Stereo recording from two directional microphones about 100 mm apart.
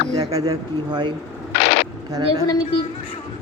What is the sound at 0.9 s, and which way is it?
Speech, 55° right (ahead or behind).